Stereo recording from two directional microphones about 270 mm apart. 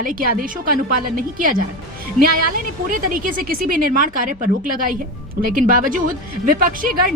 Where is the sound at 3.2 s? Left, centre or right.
Right.